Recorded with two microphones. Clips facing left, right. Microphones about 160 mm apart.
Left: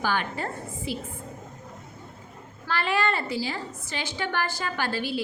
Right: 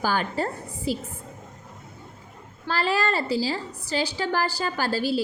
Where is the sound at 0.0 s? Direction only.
35° right (ahead or behind).